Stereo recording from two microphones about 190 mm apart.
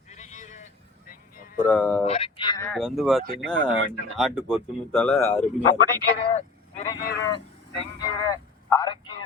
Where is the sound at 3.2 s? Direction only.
50° right (ahead or behind).